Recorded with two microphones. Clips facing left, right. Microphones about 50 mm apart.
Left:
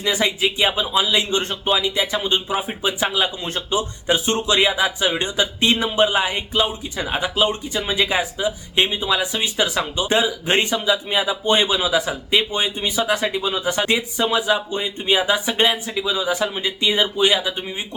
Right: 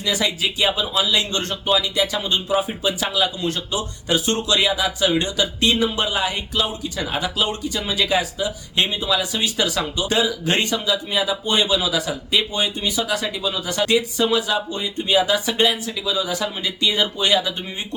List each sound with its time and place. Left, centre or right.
0.0 s speech: left